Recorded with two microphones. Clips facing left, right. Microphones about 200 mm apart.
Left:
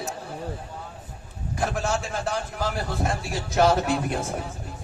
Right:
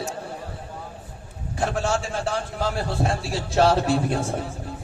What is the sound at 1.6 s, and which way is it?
A man's voice, 30° right (ahead or behind).